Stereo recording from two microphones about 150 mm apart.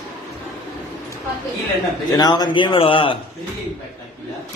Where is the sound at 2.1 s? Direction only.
25° left (ahead or behind).